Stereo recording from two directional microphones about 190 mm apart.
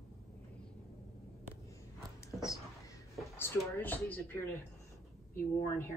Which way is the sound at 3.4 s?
10° left (ahead or behind).